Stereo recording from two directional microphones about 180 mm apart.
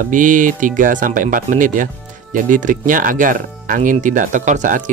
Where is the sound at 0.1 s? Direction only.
45° right (ahead or behind).